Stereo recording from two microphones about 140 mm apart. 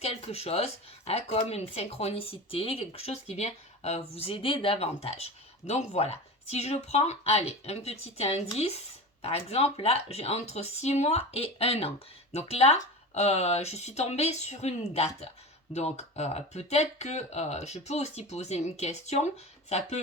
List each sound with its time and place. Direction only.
0.0 s speech: 50° left (ahead or behind)